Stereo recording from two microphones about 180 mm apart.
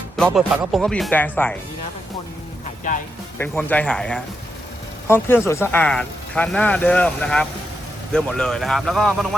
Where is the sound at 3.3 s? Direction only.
10° left (ahead or behind).